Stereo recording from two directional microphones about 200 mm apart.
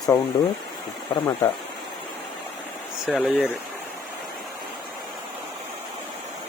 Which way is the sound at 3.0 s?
Centre (ahead or behind).